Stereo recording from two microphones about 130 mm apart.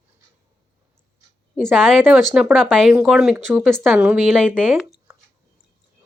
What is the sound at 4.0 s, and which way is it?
Speech, 10° right (ahead or behind).